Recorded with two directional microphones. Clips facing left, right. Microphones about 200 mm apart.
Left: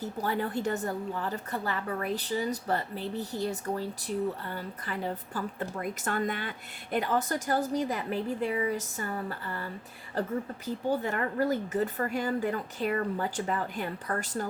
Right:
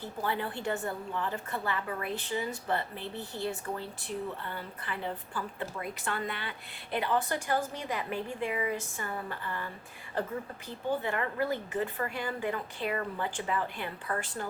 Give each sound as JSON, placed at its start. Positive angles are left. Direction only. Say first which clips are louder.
{"t": 0.0, "sound": "a woman's voice", "louder": "left 3 dB", "side_deg": 40}
{"t": 11.0, "sound": "a woman's voice", "louder": "left 3 dB", "side_deg": 40}